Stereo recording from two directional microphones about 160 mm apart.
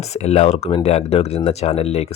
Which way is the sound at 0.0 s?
40° left (ahead or behind).